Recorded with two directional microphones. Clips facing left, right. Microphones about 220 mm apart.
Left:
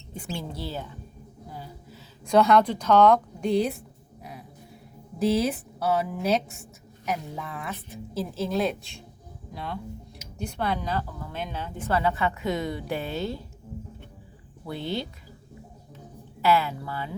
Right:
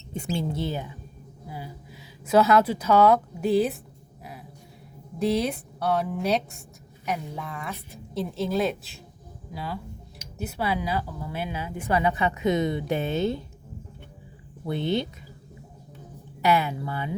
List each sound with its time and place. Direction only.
0.1 s speech: 25° right (ahead or behind); by 3.8 s 5° right (ahead or behind)
4.2 s a sound: centre (ahead or behind)
5.2 s speech: centre (ahead or behind); by 13.4 s 20° right (ahead or behind)
14.7 s speech: 20° right (ahead or behind)
16.4 s speech: 15° right (ahead or behind)